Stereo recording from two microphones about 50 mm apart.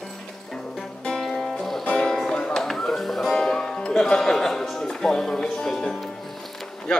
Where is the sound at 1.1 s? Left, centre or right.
Centre.